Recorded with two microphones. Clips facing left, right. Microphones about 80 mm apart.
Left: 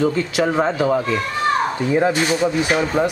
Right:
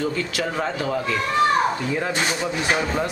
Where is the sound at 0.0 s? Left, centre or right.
Left.